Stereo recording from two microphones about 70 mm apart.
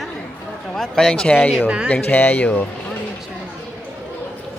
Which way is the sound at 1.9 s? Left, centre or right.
Left.